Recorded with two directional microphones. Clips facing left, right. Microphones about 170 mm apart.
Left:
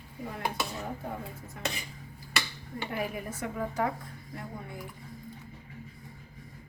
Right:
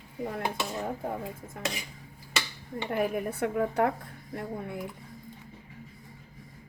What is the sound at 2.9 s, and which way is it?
Speech, 50° right (ahead or behind).